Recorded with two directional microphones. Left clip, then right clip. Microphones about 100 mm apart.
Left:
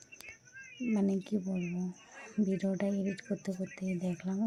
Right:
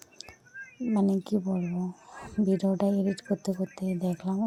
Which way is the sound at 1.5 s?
10° right (ahead or behind).